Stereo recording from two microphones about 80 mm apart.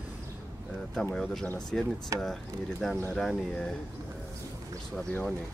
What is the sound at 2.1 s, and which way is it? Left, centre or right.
Speech, right.